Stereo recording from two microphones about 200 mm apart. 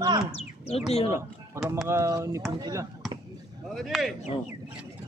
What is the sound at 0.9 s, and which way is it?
Speech, 30° left (ahead or behind).